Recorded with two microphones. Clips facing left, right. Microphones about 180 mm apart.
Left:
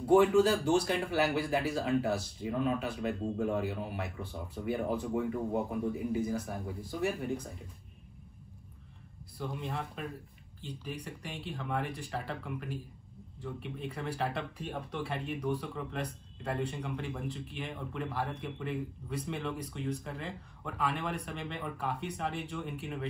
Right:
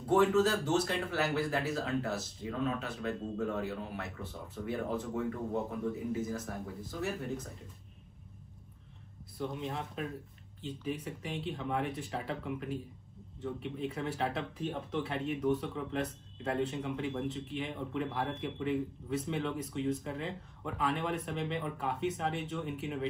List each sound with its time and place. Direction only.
0.5 s speech: centre (ahead or behind)
9.4 s speech: centre (ahead or behind)